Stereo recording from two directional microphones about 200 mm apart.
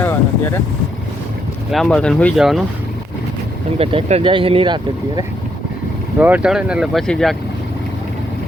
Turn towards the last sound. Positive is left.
turn(degrees=0)  # may be behind; listen again after turning